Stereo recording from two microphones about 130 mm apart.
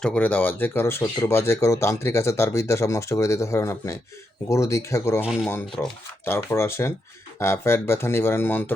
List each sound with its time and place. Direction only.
0.0 s speech: 10° left (ahead or behind)
5.2 s speech: 10° right (ahead or behind)
5.8 s speech: 15° left (ahead or behind)